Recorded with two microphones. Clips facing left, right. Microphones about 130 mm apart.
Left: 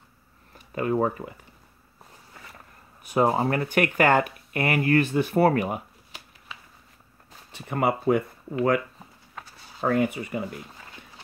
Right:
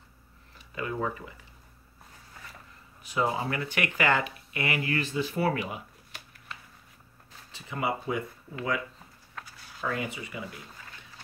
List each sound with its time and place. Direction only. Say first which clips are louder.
0.6 s speech: left 8 dB; 45° left (ahead or behind)
3.0 s speech: left 7 dB; 50° left (ahead or behind)
7.5 s speech: left 6 dB; 55° left (ahead or behind)
9.8 s speech: left 9 dB; 50° left (ahead or behind)